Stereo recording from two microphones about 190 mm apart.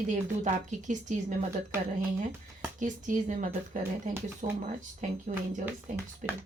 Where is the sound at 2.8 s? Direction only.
40° right (ahead or behind).